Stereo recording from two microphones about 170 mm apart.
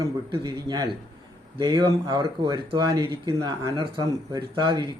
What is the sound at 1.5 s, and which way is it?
Speech, 25° right (ahead or behind).